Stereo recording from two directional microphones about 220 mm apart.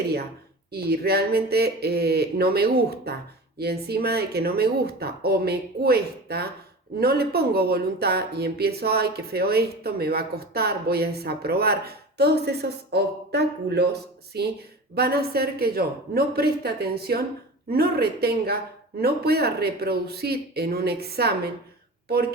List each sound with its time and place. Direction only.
0.7 s speech: 45° right (ahead or behind)